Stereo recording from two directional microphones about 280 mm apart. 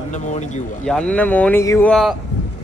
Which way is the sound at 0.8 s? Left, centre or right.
Centre.